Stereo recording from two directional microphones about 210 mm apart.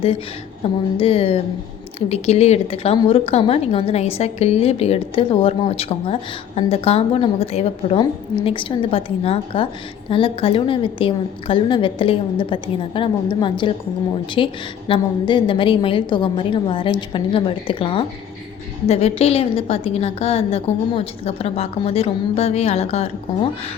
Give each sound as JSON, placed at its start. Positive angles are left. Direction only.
{"t": 0.6, "sound": "a woman's voice", "side_deg": 25}